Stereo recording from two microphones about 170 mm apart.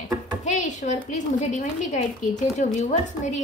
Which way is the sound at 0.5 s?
45° left (ahead or behind).